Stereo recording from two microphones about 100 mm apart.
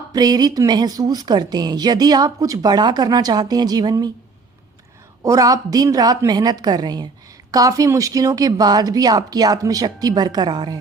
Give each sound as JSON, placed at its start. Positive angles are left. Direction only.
{"t": 0.1, "sound": "a woman's voice", "side_deg": -40}
{"t": 5.2, "sound": "a woman's voice", "side_deg": -35}